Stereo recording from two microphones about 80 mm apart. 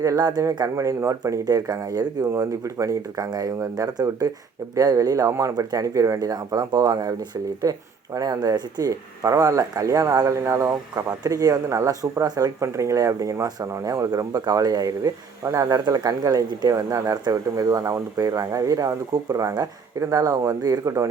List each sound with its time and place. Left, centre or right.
0.2 s speech: right
2.3 s speech: right
5.5 s speech: right